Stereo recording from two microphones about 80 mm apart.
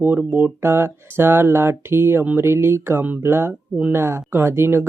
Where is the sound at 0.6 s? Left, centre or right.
Right.